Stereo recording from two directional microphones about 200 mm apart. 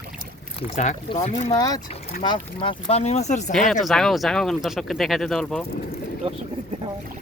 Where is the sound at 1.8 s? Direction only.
30° left (ahead or behind).